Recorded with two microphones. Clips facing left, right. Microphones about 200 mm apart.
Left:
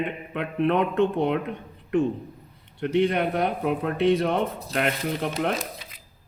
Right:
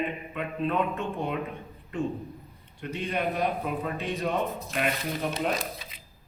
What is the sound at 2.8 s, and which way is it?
Speech, 70° left (ahead or behind).